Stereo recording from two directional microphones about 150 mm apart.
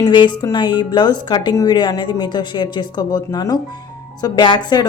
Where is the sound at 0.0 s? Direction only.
30° left (ahead or behind).